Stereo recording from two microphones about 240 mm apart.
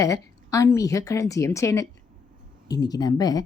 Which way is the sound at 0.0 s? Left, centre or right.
Centre.